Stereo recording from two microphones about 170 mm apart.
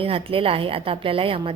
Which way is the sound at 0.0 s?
35° right (ahead or behind).